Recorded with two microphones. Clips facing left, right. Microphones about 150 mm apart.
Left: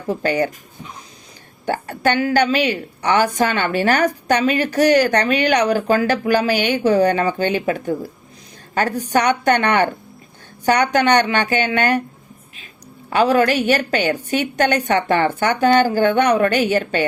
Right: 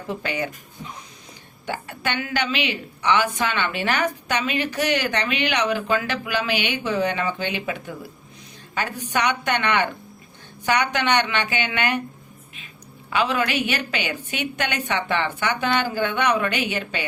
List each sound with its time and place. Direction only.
0.1 s speech: 40° left (ahead or behind)
1.6 s a woman's voice: 45° left (ahead or behind)
13.1 s a woman's voice: 40° left (ahead or behind)